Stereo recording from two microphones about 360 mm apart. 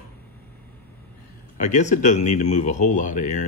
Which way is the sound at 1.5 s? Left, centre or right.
Centre.